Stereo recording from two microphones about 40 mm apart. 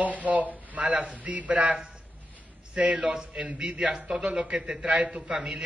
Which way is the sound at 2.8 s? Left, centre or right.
Centre.